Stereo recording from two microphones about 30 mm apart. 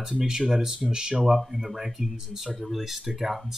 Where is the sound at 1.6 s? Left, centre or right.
Centre.